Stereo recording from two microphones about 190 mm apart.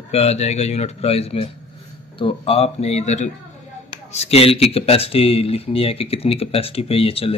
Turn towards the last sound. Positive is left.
turn(degrees=30)  # may be behind; listen again after turning